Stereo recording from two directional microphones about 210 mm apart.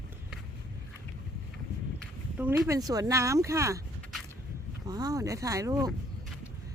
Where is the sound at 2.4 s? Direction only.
10° right (ahead or behind).